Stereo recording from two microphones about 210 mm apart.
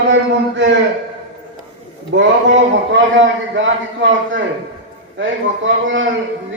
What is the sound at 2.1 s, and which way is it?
A man's voice, 65° right (ahead or behind).